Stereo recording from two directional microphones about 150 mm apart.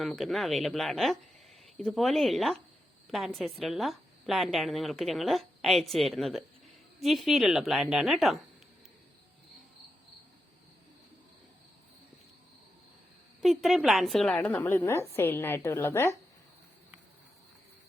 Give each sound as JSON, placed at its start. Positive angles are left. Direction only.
{"t": 0.0, "sound": "a woman's voice", "side_deg": 0}
{"t": 13.4, "sound": "a woman's voice", "side_deg": 0}